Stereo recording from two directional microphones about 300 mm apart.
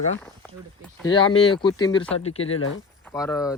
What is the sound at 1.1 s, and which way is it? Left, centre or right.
Speech, centre.